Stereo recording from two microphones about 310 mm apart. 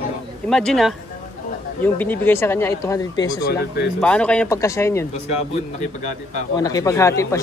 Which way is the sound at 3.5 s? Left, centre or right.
Left.